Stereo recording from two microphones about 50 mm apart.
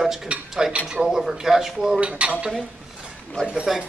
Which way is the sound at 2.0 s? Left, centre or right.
Right.